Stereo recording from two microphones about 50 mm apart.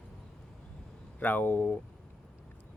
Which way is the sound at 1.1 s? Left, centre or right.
Left.